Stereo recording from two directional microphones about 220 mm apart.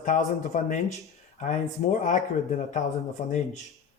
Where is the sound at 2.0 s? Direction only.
35° left (ahead or behind).